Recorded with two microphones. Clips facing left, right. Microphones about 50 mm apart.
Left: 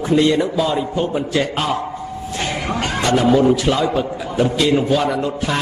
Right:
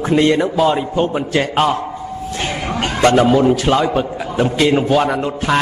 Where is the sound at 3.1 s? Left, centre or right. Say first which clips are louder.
Left 2 dB; right.